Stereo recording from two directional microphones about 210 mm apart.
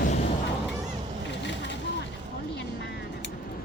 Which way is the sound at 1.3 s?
55° left (ahead or behind).